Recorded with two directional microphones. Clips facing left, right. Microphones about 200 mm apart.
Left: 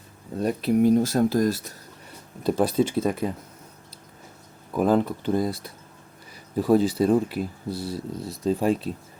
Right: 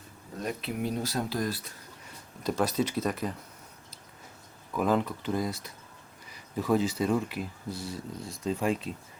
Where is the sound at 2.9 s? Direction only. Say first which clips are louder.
Left 6 dB; 25° left (ahead or behind).